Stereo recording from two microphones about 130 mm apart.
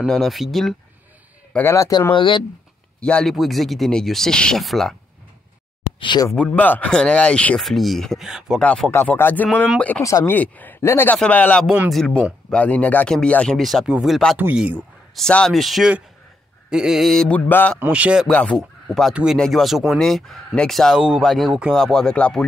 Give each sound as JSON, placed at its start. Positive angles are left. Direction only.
{"t": 0.1, "sound": "speech", "side_deg": 0}
{"t": 1.5, "sound": "speech", "side_deg": 20}
{"t": 2.1, "sound": "speech", "side_deg": 40}
{"t": 3.0, "sound": "speech", "side_deg": 5}
{"t": 5.9, "sound": "speech", "side_deg": 35}
{"t": 6.3, "sound": "speech", "side_deg": 10}
{"t": 8.5, "sound": "speech", "side_deg": 5}
{"t": 11.6, "sound": "a man's voice", "side_deg": -10}
{"t": 11.9, "sound": "a man's voice", "side_deg": 5}
{"t": 15.1, "sound": "speech", "side_deg": 5}
{"t": 17.5, "sound": "speech", "side_deg": 15}
{"t": 17.7, "sound": "a man's voice", "side_deg": -15}
{"t": 18.3, "sound": "speech", "side_deg": 10}